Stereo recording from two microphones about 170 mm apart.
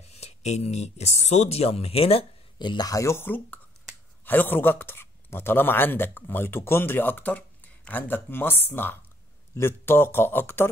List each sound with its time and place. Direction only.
0.1 s speech: 40° left (ahead or behind); by 10.7 s 15° left (ahead or behind)